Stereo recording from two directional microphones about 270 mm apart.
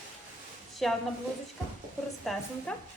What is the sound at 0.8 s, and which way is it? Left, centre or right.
Speech, centre.